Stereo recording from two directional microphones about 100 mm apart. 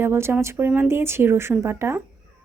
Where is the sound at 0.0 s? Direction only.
25° right (ahead or behind).